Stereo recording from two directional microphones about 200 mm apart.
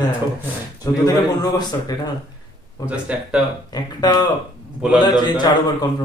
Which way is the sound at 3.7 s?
20° left (ahead or behind).